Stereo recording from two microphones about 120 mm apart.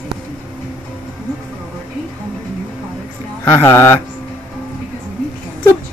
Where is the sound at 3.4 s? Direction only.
20° left (ahead or behind).